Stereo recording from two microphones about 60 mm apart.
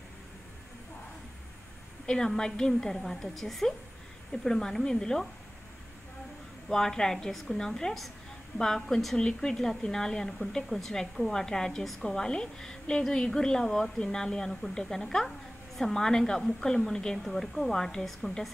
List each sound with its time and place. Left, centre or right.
2.0 s a woman's voice: centre
6.7 s a woman's voice: centre